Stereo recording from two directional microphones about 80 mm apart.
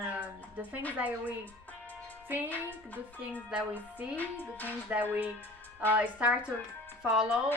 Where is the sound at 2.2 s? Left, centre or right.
Right.